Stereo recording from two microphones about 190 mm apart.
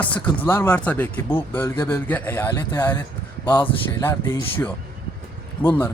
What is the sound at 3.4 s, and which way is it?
Speech, 25° left (ahead or behind).